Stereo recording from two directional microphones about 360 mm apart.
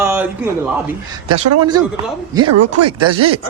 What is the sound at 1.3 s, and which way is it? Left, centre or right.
Speech, right.